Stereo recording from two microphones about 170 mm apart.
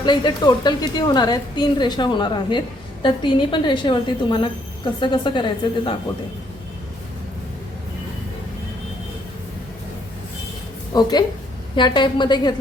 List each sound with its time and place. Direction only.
0.0 s a woman's voice: 25° left (ahead or behind)
10.9 s a woman's voice: 25° left (ahead or behind)